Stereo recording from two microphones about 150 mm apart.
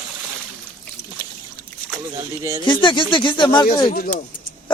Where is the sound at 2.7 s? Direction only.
35° left (ahead or behind).